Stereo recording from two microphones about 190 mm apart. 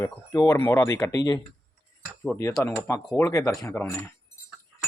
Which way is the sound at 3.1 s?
15° left (ahead or behind).